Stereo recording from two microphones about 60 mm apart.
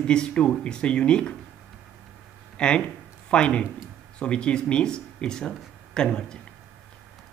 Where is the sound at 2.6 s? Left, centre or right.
Centre.